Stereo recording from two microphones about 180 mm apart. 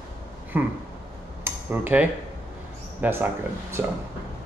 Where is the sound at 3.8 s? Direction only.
10° right (ahead or behind).